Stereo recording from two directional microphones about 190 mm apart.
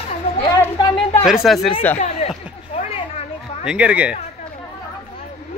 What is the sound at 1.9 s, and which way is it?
Speech, 35° left (ahead or behind).